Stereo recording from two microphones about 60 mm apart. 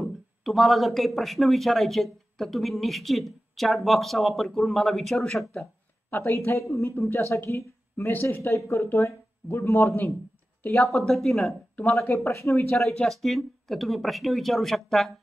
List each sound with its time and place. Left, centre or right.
0.0 s speech: centre
6.4 s a woman's voice: left
8.1 s speech: left
8.4 s a woman's voice: left
10.8 s speech: centre
12.2 s a woman's voice: left
13.0 s speech: centre